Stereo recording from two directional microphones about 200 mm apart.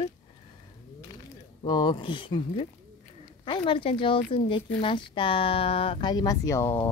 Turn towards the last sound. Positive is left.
turn(degrees=15)  # may be behind; listen again after turning